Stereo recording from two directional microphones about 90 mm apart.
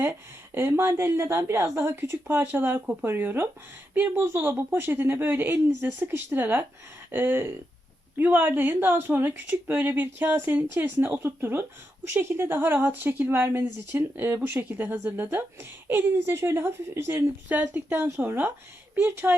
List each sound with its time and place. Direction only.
0.0 s a woman's voice: 30° right (ahead or behind)
17.5 s a woman's voice: 15° right (ahead or behind)
17.9 s a woman's voice: 25° right (ahead or behind)